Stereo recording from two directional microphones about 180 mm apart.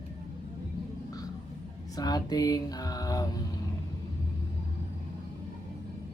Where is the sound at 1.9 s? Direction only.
20° left (ahead or behind).